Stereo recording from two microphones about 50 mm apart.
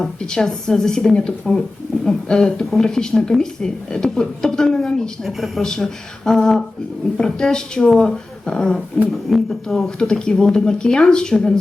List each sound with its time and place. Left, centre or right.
0.0 s speech: centre
5.2 s speech: centre
5.6 s speech: centre